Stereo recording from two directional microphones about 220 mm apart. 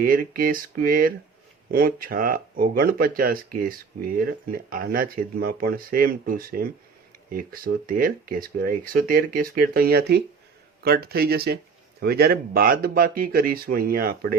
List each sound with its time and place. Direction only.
0.0 s speech: 40° right (ahead or behind)